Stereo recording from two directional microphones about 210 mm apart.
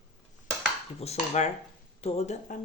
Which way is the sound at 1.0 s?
30° left (ahead or behind).